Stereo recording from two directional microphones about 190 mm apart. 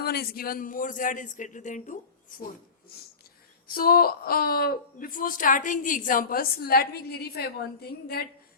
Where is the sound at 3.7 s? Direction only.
50° left (ahead or behind).